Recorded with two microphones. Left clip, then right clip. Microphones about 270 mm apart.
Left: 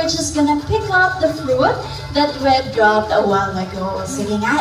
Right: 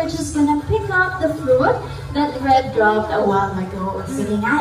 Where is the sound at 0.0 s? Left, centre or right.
Centre.